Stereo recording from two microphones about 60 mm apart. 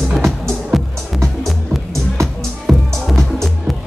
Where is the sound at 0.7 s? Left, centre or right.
Centre.